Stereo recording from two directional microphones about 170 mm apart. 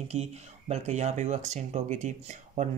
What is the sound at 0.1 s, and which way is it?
Speech, 40° right (ahead or behind).